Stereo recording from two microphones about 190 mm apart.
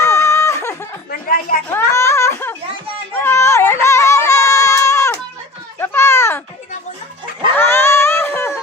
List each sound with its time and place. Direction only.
0.0 s snicker: 15° left (ahead or behind)
1.1 s a sound: 50° left (ahead or behind)
1.7 s baby cry: 15° left (ahead or behind)
3.1 s music: 10° left (ahead or behind)
5.8 s children playing: 10° left (ahead or behind)
7.5 s a sound: 10° left (ahead or behind)